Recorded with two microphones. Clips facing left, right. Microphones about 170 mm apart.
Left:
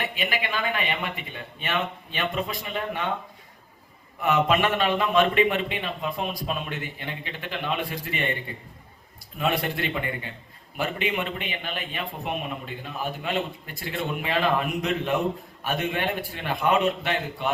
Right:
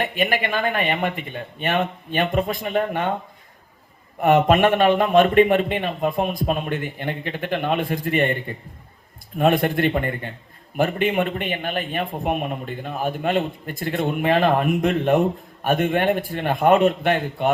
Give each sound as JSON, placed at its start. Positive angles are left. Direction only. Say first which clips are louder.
{"t": 0.0, "sound": "a man's voice", "louder": "right 7 dB", "side_deg": -50}
{"t": 4.2, "sound": "a man's voice", "louder": "right 6 dB", "side_deg": -50}
{"t": 9.4, "sound": "a man's voice", "louder": "right 8 dB", "side_deg": -50}